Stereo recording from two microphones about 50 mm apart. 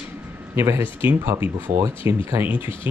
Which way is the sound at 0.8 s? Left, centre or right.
Right.